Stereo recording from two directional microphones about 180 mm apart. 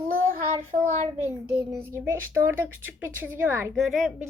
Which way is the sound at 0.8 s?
10° right (ahead or behind).